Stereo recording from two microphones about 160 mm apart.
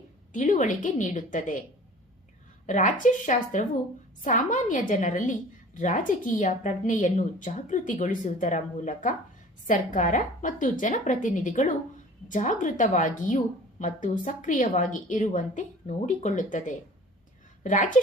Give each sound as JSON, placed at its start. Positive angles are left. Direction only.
{"t": 0.3, "sound": "a woman's voice", "side_deg": 50}
{"t": 2.6, "sound": "a woman's voice", "side_deg": 55}